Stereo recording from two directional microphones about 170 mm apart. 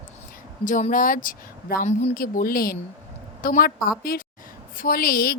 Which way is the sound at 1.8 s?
40° left (ahead or behind).